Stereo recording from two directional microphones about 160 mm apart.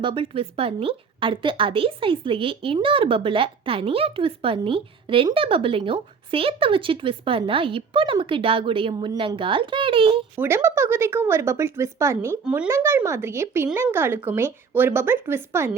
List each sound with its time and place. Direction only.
0.0 s a woman's voice: 30° right (ahead or behind)
10.3 s speech: 15° right (ahead or behind)